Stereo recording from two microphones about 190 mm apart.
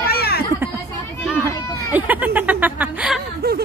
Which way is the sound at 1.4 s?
10° right (ahead or behind).